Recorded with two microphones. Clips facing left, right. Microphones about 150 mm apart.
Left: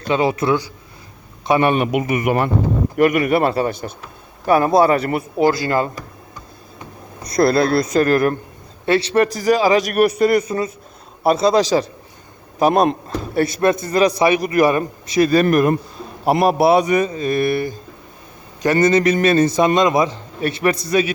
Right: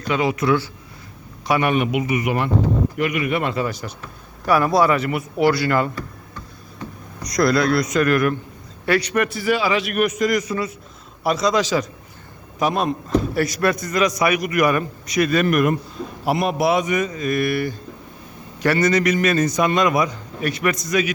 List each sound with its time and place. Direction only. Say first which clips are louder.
0.1 s a man's voice: left 2 dB; 30° left (ahead or behind)
1.7 s speech: left 2 dB; 45° left (ahead or behind)
3.7 s speech: left 4 dB; 55° left (ahead or behind)
4.4 s a man's voice: left 3 dB; 30° left (ahead or behind)
5.4 s a man's voice: left 1 dB; 25° left (ahead or behind)
5.9 s tick-tock: right 2 dB; 15° left (ahead or behind)
7.2 s a man's voice: left 3 dB; 30° left (ahead or behind)